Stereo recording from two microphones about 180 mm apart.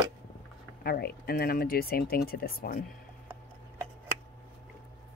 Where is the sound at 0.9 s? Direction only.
55° left (ahead or behind).